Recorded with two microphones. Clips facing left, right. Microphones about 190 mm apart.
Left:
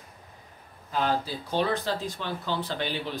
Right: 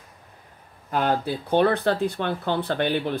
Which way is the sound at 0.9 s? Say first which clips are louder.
Right 4 dB; 60° right (ahead or behind).